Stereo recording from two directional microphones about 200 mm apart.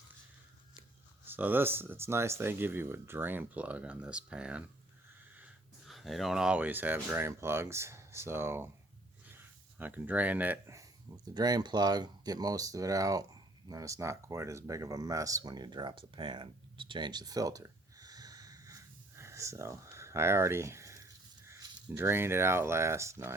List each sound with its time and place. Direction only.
0.8 s speech: 10° right (ahead or behind)
5.9 s speech: centre (ahead or behind)